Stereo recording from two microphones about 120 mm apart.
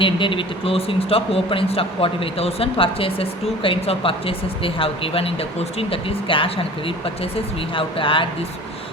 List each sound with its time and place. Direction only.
0.0 s speech: 45° left (ahead or behind)